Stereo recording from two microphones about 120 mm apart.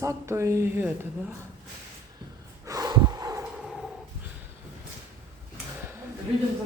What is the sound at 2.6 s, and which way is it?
Snort, 30° right (ahead or behind).